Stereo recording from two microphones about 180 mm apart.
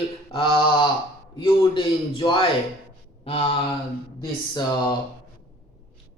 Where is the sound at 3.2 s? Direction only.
35° left (ahead or behind).